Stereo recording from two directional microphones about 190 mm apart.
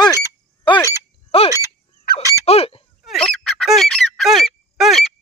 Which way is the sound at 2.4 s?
30° left (ahead or behind).